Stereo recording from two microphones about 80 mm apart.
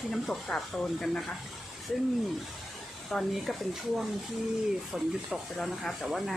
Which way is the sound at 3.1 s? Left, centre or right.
Centre.